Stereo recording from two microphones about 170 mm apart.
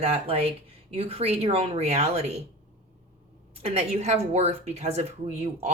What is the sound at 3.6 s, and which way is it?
Speech, 40° right (ahead or behind).